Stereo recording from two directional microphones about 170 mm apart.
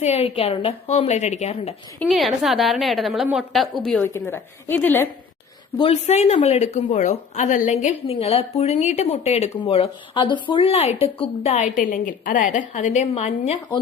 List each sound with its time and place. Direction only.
0.0 s a woman's voice: 40° left (ahead or behind)
2.0 s a woman's voice: centre (ahead or behind)
5.7 s a woman's voice: 35° left (ahead or behind)